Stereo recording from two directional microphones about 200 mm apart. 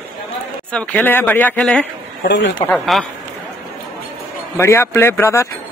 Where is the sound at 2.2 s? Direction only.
60° left (ahead or behind).